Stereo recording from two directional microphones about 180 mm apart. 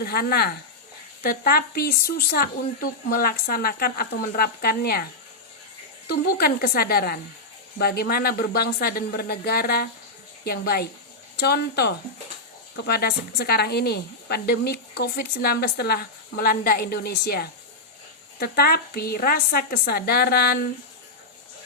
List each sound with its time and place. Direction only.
0.0 s speech: 60° left (ahead or behind)
6.1 s speech: 60° left (ahead or behind)